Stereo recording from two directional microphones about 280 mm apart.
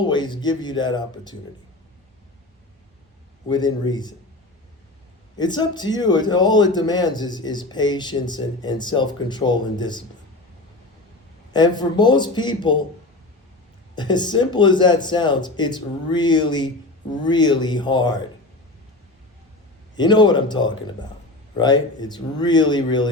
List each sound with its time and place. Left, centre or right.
0.0 s a man's voice: centre
3.5 s a man's voice: centre
5.4 s a man's voice: centre
11.5 s a man's voice: centre
13.9 s a man's voice: centre
20.0 s a man's voice: centre